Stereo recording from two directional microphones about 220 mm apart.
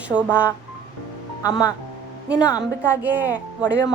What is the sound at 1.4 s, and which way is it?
Speech, 15° left (ahead or behind).